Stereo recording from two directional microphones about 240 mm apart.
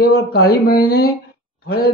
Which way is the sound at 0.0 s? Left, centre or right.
Left.